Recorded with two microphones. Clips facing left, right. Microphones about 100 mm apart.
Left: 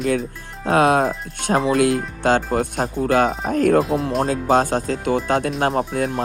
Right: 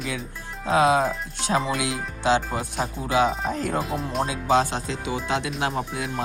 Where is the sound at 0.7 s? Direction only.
60° left (ahead or behind).